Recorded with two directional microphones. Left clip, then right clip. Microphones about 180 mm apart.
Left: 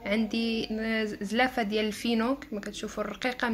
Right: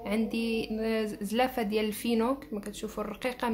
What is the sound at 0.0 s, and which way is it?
Speech, centre (ahead or behind).